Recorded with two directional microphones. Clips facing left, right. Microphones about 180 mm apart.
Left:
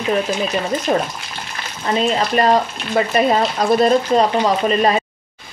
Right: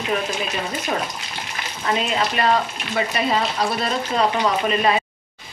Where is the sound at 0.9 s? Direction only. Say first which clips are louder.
Left 6 dB; 40° left (ahead or behind).